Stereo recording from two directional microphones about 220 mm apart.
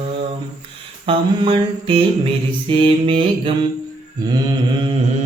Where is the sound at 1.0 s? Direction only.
25° right (ahead or behind).